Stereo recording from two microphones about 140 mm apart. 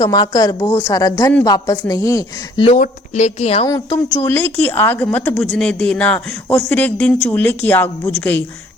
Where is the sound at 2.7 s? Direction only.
60° left (ahead or behind).